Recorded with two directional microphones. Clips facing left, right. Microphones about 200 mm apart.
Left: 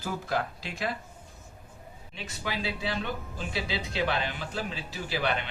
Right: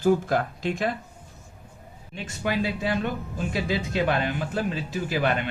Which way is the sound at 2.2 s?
50° right (ahead or behind).